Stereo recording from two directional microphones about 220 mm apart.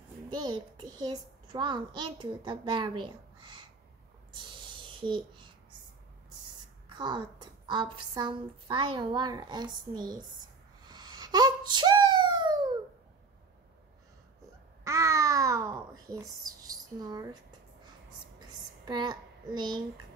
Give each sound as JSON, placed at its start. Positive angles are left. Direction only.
{"t": 0.3, "sound": "a child's voice", "side_deg": -20}
{"t": 4.3, "sound": "a sound", "side_deg": -20}
{"t": 6.9, "sound": "a woman's voice", "side_deg": -20}
{"t": 10.9, "sound": "a sound", "side_deg": -20}
{"t": 14.9, "sound": "babbling", "side_deg": -15}
{"t": 18.9, "sound": "a child's voice", "side_deg": -20}